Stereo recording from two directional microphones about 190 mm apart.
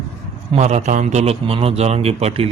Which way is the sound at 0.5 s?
35° right (ahead or behind).